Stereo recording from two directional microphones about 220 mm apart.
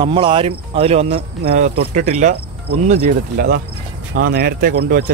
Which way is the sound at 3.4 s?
45° right (ahead or behind).